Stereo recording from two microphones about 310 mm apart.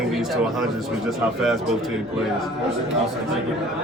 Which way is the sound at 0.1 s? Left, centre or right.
Centre.